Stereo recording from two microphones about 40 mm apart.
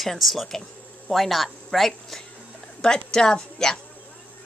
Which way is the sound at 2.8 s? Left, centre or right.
Centre.